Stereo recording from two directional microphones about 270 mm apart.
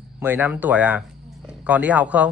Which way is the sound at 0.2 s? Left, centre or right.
Centre.